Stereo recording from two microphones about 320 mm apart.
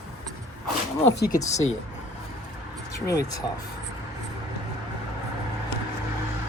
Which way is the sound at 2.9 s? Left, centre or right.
Centre.